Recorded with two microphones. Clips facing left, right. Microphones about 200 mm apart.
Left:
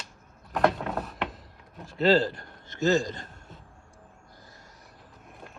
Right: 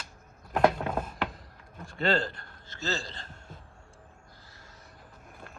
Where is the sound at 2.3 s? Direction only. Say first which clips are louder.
Left 9 dB; 15° left (ahead or behind).